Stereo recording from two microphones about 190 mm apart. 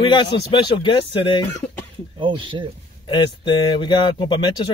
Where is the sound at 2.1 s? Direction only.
25° right (ahead or behind).